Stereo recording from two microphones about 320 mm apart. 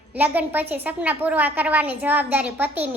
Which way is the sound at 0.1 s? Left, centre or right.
Centre.